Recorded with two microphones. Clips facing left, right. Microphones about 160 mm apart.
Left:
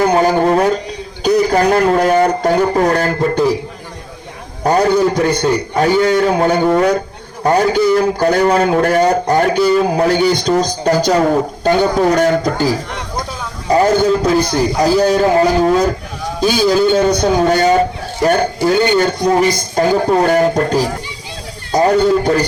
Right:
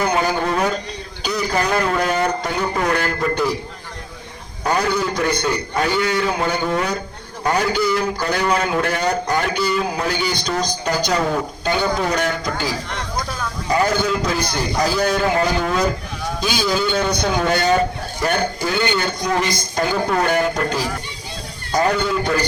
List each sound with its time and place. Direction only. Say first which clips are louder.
0.0 s a sound: left 7 dB; 40° left (ahead or behind)
1.2 s a man's voice: left 9 dB; 45° left (ahead or behind)
4.6 s a man's voice: left 8 dB; 40° left (ahead or behind)
13.7 s a man's voice: left 7 dB; 40° left (ahead or behind)